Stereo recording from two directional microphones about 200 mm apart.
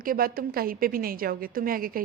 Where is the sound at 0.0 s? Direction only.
45° right (ahead or behind).